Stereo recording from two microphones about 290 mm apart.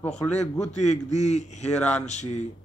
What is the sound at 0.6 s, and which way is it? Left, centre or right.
A man's voice, left.